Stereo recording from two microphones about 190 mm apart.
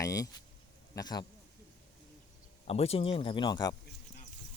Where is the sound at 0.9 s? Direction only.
20° left (ahead or behind).